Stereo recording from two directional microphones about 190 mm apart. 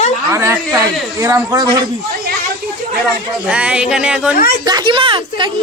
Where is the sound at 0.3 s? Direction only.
15° right (ahead or behind).